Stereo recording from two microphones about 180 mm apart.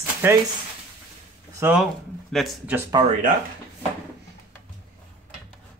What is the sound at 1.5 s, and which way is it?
Speech, 10° right (ahead or behind).